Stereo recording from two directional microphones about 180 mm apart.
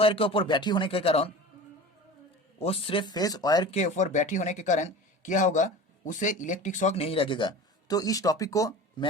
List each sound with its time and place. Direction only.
0.0 s speech: 30° left (ahead or behind)
2.6 s speech: 35° left (ahead or behind)
3.7 s speech: 40° left (ahead or behind); by 9.0 s 20° left (ahead or behind)